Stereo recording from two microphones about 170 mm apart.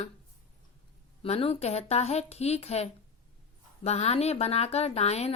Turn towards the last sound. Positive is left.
turn(degrees=40)  # may be behind; listen again after turning